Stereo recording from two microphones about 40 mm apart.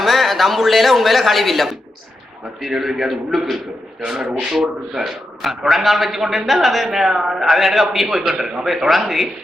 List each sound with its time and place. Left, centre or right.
0.0 s a man's voice: centre
4.0 s speech: centre
4.5 s a man's voice: centre